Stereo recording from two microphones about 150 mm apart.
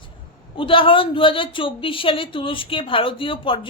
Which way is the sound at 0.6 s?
35° left (ahead or behind).